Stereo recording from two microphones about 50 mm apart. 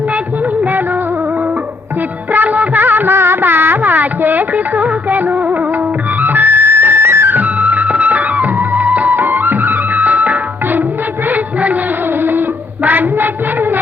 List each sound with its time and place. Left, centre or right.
0.6 s music of bollywood: right
2.3 s music of bollywood: right
6.1 s music: right
7.3 s music: right